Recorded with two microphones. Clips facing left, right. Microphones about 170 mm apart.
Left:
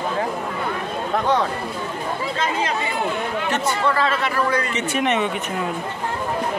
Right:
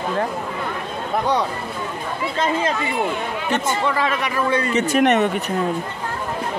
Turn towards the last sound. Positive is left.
turn(degrees=-45)  # may be behind; listen again after turning